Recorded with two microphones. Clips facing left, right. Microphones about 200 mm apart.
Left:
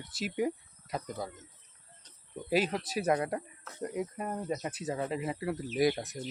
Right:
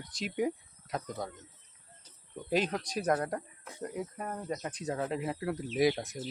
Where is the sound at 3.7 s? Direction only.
15° right (ahead or behind).